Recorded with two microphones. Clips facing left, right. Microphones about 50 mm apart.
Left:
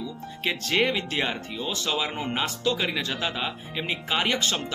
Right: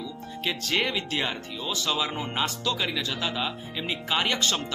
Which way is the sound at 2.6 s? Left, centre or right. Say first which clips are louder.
Left 2 dB; left.